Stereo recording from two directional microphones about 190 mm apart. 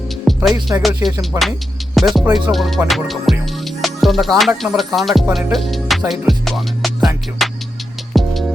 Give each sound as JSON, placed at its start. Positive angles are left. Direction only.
{"t": 0.3, "sound": "music", "side_deg": 0}
{"t": 1.3, "sound": "music", "side_deg": -15}
{"t": 2.0, "sound": "music", "side_deg": 0}